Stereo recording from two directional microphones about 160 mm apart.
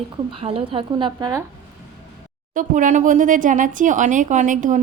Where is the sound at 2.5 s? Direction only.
55° right (ahead or behind).